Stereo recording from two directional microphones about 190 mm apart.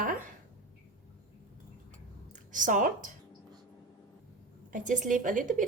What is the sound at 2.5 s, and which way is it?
Speech, 45° right (ahead or behind).